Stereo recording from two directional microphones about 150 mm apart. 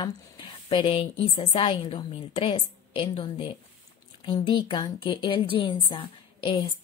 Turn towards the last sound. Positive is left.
turn(degrees=30)  # may be behind; listen again after turning